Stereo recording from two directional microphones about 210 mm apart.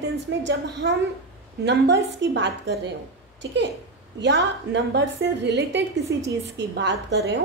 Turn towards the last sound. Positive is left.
turn(degrees=-55)  # may be behind; listen again after turning